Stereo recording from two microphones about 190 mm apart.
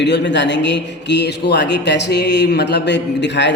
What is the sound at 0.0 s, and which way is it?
A man's voice, 65° left (ahead or behind).